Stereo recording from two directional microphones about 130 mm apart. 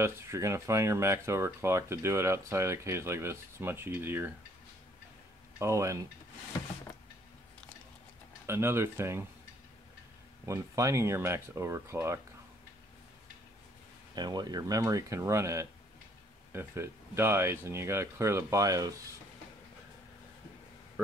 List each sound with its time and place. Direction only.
0.0 s speech: 20° right (ahead or behind)
5.6 s speech: 20° right (ahead or behind)
8.5 s speech: 20° right (ahead or behind)
10.4 s speech: 25° right (ahead or behind)
14.1 s speech: 30° right (ahead or behind)